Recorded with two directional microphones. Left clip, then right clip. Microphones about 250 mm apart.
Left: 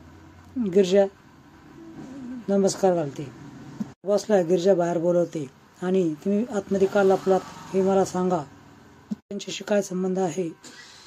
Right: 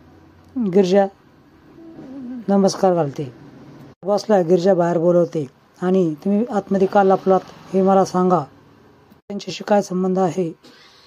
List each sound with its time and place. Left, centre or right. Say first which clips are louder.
0.7 s speech: right 4 dB; right
2.4 s speech: right 5 dB; right